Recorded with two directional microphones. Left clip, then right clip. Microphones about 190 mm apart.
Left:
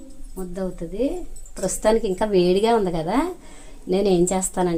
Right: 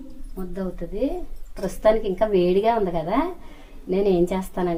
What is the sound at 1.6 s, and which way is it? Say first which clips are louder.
Speech: even; 55° left (ahead or behind).